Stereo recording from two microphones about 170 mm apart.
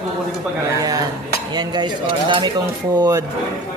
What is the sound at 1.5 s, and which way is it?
Speech, 25° right (ahead or behind).